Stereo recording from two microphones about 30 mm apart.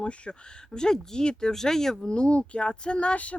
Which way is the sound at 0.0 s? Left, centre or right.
Left.